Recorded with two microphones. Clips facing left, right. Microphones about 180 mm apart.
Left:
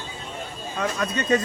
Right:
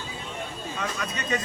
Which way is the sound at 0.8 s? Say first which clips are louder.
Left 7 dB; 50° left (ahead or behind).